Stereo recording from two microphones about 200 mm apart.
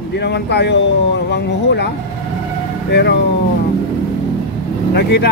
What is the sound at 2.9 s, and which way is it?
Speech, 55° left (ahead or behind).